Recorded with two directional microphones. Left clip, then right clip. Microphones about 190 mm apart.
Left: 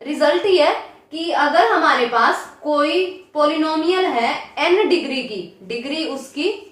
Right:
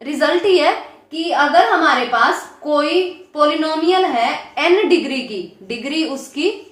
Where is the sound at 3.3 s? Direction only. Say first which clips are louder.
Right 2 dB; 30° right (ahead or behind).